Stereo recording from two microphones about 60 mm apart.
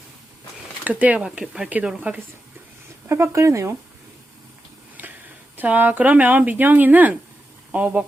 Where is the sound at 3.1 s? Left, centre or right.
Right.